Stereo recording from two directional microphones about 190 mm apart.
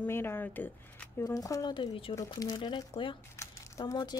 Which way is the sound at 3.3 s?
15° left (ahead or behind).